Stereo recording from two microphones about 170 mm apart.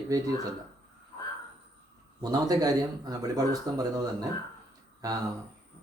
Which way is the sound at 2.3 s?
20° right (ahead or behind).